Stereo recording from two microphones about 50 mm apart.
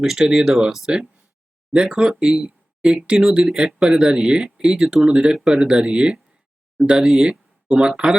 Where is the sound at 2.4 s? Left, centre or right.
Centre.